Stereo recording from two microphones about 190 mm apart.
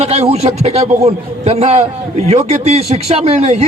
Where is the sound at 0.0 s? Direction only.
35° right (ahead or behind).